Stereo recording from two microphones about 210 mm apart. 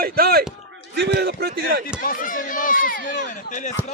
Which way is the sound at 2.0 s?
40° left (ahead or behind).